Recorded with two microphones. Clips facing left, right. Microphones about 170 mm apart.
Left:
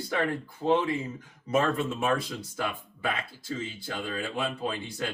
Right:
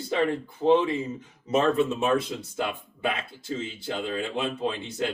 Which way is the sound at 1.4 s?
25° right (ahead or behind).